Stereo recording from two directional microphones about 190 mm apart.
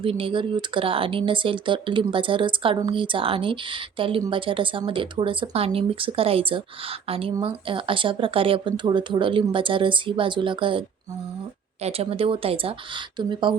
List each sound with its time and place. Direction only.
0.0 s speech: 30° right (ahead or behind)